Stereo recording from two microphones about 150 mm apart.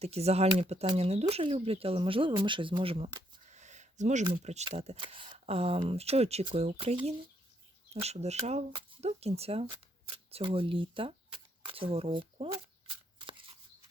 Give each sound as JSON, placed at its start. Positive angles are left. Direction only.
{"t": 0.0, "sound": "speech", "side_deg": -45}
{"t": 3.5, "sound": "speech", "side_deg": -50}
{"t": 13.1, "sound": "shuffling cards", "side_deg": -35}